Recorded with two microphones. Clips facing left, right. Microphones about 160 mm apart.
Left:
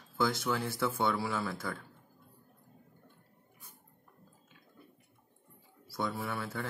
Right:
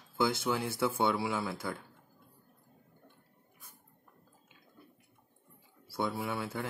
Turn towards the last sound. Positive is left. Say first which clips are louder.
# right 2 dB
turn(degrees=-15)  # may be behind; listen again after turning